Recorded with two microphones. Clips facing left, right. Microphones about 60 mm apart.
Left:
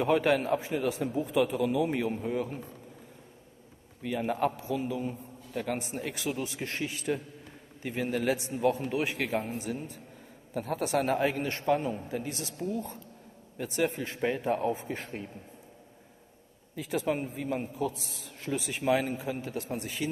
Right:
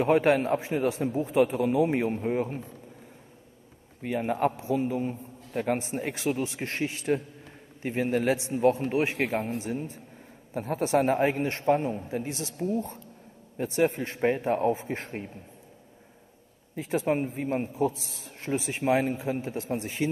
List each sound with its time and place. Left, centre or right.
0.0 s a man's voice: right
4.0 s a man's voice: right
12.7 s a man's voice: right
16.7 s a man's voice: right